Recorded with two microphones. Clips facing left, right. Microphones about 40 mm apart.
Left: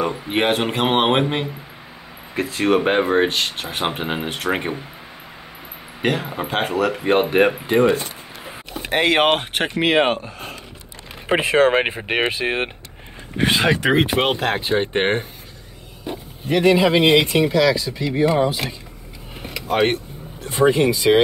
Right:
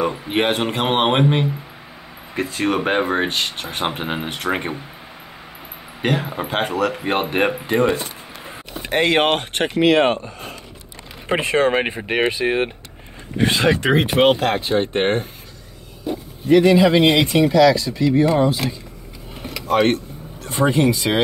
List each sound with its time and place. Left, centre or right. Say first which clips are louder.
0.0 s speech: even; centre
6.0 s speech: even; centre; by 10.3 s left
11.2 s speech: left 2 dB; centre
12.3 s speech: right 2 dB; left
14.2 s speech: right 4 dB; centre
14.7 s speech: left 1 dB; centre
16.1 s speech: right 4 dB; left
16.5 s speech: right 2 dB; centre
19.4 s vehicle: right 2 dB; centre
20.4 s speech: left 1 dB; centre